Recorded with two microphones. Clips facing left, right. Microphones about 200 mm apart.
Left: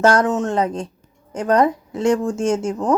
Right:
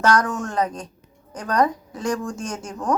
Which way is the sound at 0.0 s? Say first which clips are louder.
Left 5 dB; 25° left (ahead or behind).